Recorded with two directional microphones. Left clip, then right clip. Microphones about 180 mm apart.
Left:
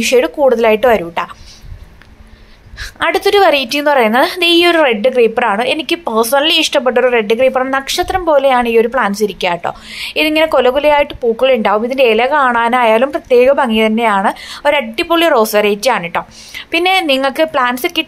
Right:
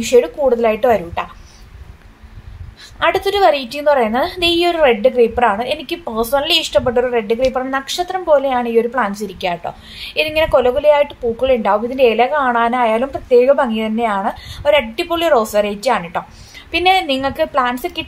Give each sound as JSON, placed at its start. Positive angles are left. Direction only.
{"t": 0.0, "sound": "a woman's voice", "side_deg": 15}
{"t": 2.8, "sound": "a woman's voice", "side_deg": 15}